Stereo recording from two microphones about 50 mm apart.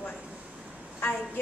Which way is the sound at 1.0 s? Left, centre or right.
Left.